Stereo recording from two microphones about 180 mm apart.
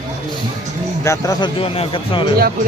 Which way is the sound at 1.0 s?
15° left (ahead or behind).